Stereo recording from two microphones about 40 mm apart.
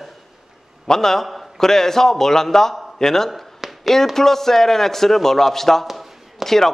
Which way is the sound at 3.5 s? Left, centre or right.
Centre.